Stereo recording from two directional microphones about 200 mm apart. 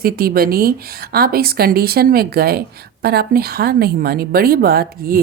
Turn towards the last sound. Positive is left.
turn(degrees=-50)  # may be behind; listen again after turning